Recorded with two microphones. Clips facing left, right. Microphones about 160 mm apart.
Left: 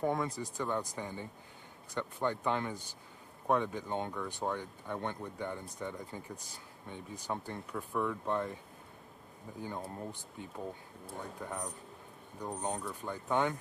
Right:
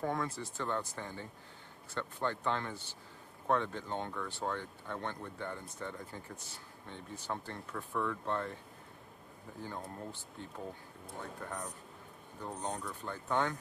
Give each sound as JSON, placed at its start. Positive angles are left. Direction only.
{"t": 0.0, "sound": "speech", "side_deg": 15}